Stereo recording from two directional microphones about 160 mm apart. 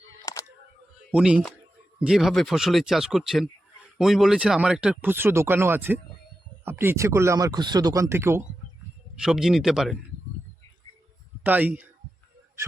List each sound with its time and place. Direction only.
1.1 s speech: 5° right (ahead or behind)
9.1 s speech: 5° right (ahead or behind)
11.4 s speech: 10° right (ahead or behind)